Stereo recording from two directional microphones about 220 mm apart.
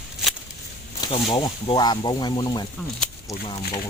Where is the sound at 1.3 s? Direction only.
20° left (ahead or behind).